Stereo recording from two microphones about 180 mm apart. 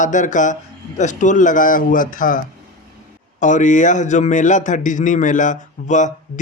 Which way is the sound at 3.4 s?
45° left (ahead or behind).